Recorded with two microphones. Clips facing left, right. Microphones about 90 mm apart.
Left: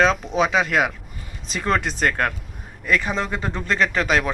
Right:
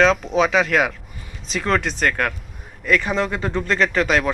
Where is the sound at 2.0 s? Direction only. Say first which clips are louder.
Even; 25° left (ahead or behind).